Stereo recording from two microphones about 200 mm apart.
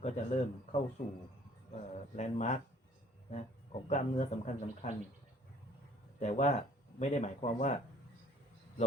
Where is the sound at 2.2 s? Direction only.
35° left (ahead or behind).